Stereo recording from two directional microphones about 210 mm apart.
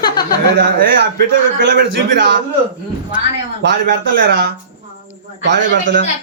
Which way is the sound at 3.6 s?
55° right (ahead or behind).